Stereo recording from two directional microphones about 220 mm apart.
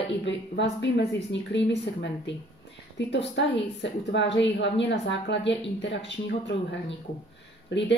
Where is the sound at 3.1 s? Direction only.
55° left (ahead or behind).